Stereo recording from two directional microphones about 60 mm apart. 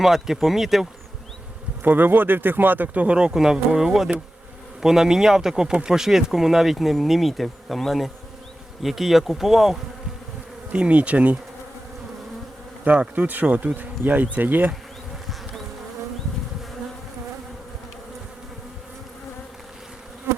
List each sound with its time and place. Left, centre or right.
0.0 s speech: centre
1.8 s speech: right; by 9.7 s centre
10.7 s bee: right
12.8 s bee: right